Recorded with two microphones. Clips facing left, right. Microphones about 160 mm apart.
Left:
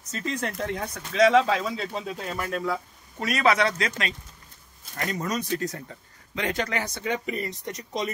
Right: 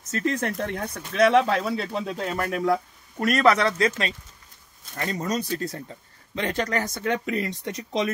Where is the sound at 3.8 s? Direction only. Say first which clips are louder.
Right 5 dB; 30° right (ahead or behind).